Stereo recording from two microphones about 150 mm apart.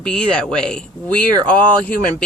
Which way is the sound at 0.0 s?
5° left (ahead or behind).